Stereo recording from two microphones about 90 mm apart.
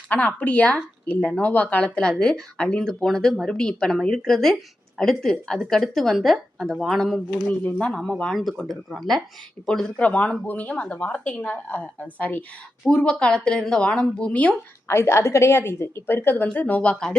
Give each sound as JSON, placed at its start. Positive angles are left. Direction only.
{"t": 0.1, "sound": "a woman's voice", "side_deg": 15}
{"t": 7.6, "sound": "a woman's voice", "side_deg": 15}
{"t": 10.0, "sound": "speech", "side_deg": 15}
{"t": 14.8, "sound": "a woman's voice", "side_deg": 30}